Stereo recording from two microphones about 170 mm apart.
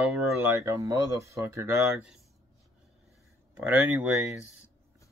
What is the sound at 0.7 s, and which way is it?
Speech, 20° right (ahead or behind).